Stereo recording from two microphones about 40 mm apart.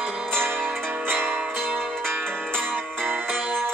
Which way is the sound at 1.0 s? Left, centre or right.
Right.